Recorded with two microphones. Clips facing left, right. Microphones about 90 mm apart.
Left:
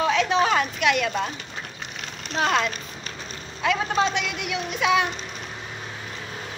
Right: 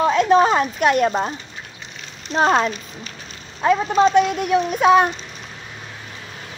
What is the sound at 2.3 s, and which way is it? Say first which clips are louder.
Speech: right 6 dB; 35° right (ahead or behind).